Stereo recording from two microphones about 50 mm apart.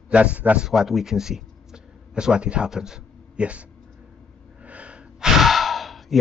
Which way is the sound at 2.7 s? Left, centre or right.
Centre.